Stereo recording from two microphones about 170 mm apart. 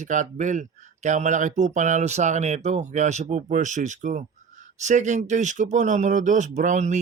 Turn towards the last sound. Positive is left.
turn(degrees=-45)  # may be behind; listen again after turning